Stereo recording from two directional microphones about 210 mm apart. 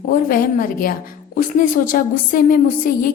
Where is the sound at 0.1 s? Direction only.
40° left (ahead or behind).